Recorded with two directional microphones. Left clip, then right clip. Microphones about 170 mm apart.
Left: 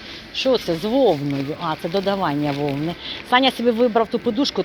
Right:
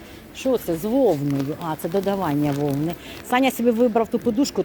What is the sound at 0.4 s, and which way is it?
Speech, centre (ahead or behind).